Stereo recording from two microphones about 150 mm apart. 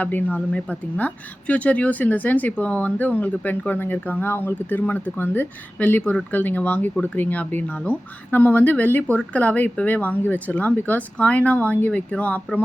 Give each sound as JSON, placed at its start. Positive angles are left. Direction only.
{"t": 0.0, "sound": "speech", "side_deg": 10}